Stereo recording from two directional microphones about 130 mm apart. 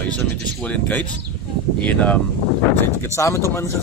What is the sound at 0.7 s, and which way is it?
Speech, 10° left (ahead or behind).